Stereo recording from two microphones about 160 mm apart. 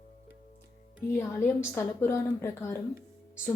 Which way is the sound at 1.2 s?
15° left (ahead or behind).